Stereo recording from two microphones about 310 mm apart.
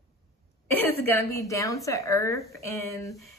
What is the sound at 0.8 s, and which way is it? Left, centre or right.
A woman's voice, centre.